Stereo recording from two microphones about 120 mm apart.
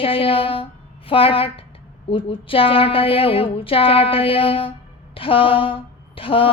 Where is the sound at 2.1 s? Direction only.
50° left (ahead or behind).